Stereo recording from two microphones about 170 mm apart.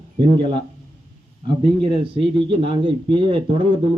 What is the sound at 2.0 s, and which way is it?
A man's voice, 30° right (ahead or behind).